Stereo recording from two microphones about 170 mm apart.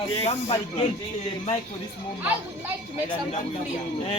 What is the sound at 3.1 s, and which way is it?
Speech, 40° left (ahead or behind).